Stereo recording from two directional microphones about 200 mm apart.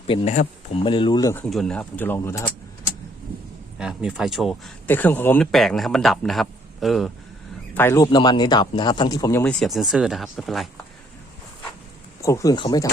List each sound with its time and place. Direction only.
0.1 s speech: 25° left (ahead or behind)
1.5 s a man's voice: centre (ahead or behind)
3.8 s a man's voice: 5° right (ahead or behind)
7.7 s a man's voice: 10° left (ahead or behind)
12.2 s a man's voice: 15° left (ahead or behind)